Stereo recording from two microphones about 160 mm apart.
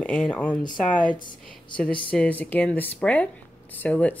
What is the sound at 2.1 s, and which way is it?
Speech, 10° left (ahead or behind).